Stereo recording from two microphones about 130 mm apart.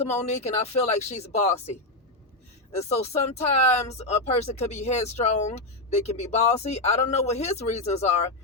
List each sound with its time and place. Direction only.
0.3 s speech: 60° left (ahead or behind)
2.7 s speech: 55° left (ahead or behind)